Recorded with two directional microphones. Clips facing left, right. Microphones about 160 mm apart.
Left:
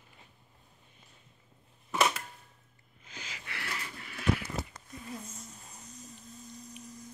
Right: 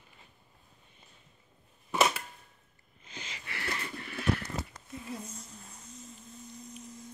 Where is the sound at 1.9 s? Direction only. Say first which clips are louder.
Right 1 dB; 5° right (ahead or behind).